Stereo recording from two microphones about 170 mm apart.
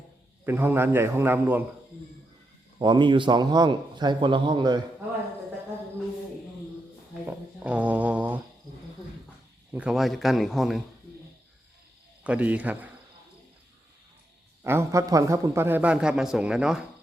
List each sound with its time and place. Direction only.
0.4 s a man's voice: 15° right (ahead or behind)
2.7 s a man's voice: 25° right (ahead or behind)
7.3 s a sound: 10° right (ahead or behind)
9.7 s a man's voice: 5° right (ahead or behind)
12.2 s a man's voice: 10° right (ahead or behind)
14.6 s a man's voice: 15° right (ahead or behind)